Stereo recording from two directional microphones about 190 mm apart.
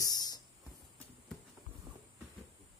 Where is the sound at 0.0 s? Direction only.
20° left (ahead or behind).